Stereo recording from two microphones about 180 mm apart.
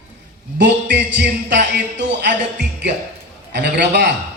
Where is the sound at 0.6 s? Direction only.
65° right (ahead or behind).